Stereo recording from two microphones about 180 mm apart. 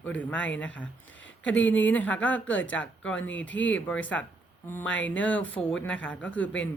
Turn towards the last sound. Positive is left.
turn(degrees=5)  # may be behind; listen again after turning